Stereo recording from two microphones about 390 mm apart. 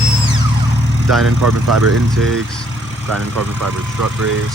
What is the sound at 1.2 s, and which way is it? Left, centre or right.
Speech, right.